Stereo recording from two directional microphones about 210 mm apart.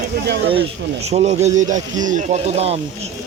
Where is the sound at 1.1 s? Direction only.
30° right (ahead or behind).